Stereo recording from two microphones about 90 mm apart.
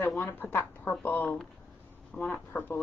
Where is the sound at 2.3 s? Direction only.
25° left (ahead or behind).